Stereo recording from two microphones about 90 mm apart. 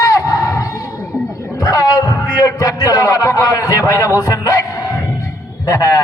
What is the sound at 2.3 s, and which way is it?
A man's voice, 50° left (ahead or behind).